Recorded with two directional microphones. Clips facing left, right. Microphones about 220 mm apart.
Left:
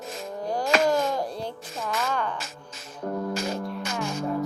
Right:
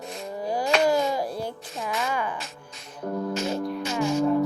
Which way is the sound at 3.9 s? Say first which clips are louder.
Right 8 dB; centre (ahead or behind).